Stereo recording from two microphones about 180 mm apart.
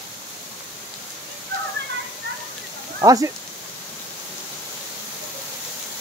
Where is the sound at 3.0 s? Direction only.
20° right (ahead or behind).